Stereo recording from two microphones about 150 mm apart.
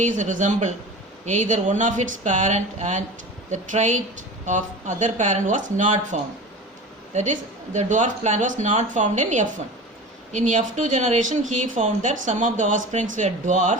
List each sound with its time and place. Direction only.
0.0 s speech: 55° right (ahead or behind)